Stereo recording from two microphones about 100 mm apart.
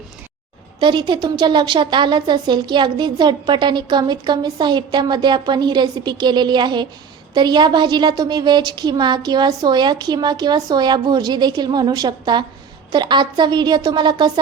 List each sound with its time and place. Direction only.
0.8 s a woman's voice: 50° right (ahead or behind)